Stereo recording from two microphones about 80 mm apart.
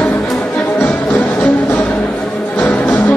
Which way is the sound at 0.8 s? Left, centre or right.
Left.